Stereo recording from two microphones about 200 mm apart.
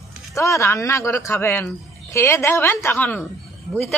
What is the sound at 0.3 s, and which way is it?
Speech, 15° left (ahead or behind).